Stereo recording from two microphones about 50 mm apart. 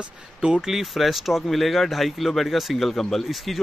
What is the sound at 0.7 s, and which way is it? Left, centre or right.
A man's voice, centre.